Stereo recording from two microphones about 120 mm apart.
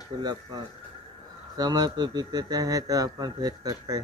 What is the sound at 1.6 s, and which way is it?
Speech, 35° right (ahead or behind).